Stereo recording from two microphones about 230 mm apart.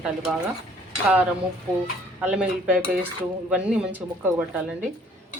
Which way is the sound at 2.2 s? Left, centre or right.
Centre.